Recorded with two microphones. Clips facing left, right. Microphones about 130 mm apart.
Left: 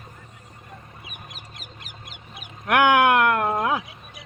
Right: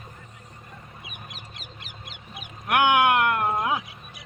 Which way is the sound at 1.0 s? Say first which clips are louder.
Even; 45° left (ahead or behind).